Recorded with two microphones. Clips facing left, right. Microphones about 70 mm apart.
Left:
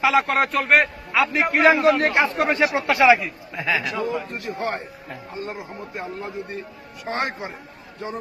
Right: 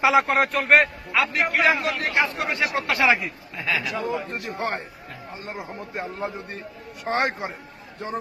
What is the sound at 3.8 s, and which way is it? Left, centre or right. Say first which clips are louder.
Speech: left 2 dB; left.